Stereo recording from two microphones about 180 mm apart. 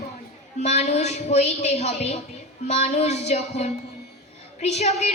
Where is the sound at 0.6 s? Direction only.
40° left (ahead or behind).